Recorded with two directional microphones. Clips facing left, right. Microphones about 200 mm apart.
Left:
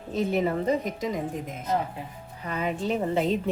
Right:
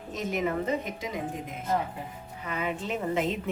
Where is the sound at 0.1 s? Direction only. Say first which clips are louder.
Left 4 dB; 30° left (ahead or behind).